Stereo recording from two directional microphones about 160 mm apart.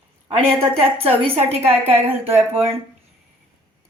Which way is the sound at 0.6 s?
35° right (ahead or behind).